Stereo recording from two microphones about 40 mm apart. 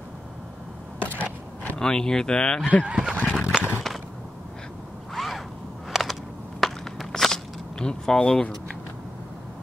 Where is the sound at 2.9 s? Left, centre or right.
Right.